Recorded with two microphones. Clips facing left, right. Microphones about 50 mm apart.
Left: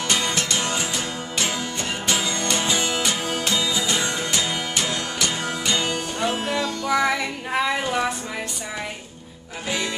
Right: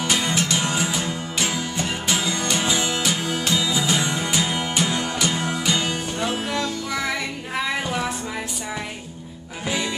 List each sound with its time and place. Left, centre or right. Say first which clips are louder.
0.0 s music: right 1 dB; centre